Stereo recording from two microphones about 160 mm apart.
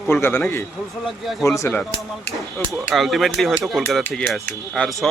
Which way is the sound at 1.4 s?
20° left (ahead or behind).